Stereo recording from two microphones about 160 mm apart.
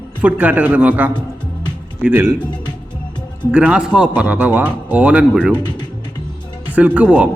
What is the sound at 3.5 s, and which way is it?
A man's voice, 10° right (ahead or behind).